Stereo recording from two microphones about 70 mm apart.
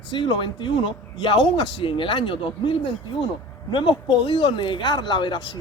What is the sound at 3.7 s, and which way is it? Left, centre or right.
Speech, left.